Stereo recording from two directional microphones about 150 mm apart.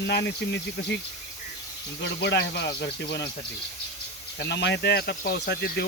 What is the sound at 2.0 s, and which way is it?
Speech, 90° left.